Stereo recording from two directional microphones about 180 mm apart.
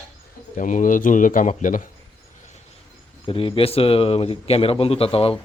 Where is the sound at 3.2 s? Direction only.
30° left (ahead or behind).